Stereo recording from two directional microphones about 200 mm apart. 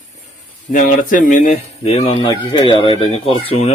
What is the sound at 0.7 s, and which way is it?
Speech, 40° left (ahead or behind).